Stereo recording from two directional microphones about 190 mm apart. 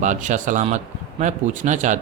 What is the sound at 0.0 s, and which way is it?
Speech, 40° right (ahead or behind).